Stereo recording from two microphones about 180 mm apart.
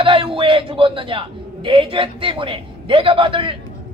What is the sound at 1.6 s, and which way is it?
A man's voice, 30° right (ahead or behind).